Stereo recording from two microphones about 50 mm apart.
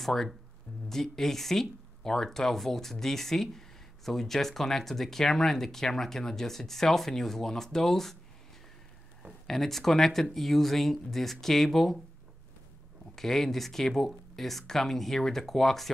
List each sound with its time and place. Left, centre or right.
0.0 s speech: centre
9.5 s speech: centre
13.1 s speech: centre